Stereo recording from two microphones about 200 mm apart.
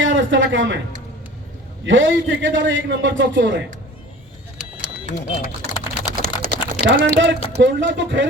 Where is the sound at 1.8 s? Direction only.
65° right (ahead or behind).